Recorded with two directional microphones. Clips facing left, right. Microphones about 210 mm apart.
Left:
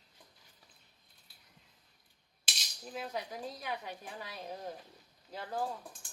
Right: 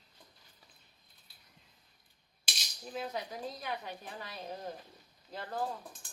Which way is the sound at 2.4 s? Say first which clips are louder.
Right 1 dB; centre (ahead or behind).